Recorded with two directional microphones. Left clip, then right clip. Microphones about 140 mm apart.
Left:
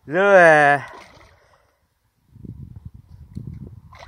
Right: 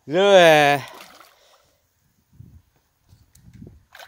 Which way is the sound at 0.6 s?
10° right (ahead or behind).